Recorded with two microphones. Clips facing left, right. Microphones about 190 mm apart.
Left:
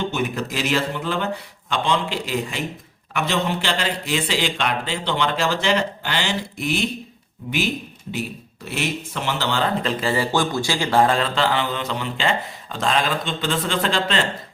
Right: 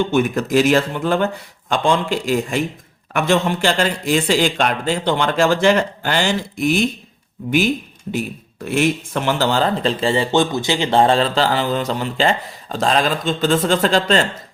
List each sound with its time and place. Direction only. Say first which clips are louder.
0.1 s a man's voice: right 8 dB; 50° right (ahead or behind)
8.6 s speech: right 8 dB; 50° right (ahead or behind)